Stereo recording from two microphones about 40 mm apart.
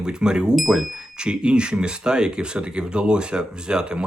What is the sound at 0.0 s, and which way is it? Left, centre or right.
Speech, right.